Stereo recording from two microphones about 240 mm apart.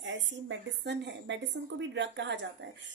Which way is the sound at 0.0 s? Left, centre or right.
Right.